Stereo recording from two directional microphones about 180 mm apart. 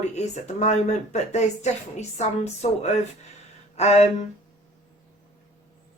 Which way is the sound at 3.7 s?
35° left (ahead or behind).